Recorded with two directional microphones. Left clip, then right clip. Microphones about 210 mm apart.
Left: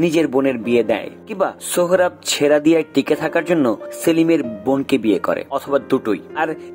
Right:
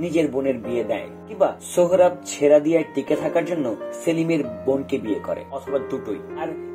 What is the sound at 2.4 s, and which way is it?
Speech, 25° left (ahead or behind).